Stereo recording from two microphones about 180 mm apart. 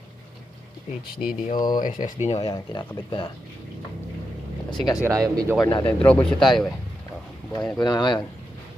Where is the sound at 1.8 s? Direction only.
50° left (ahead or behind).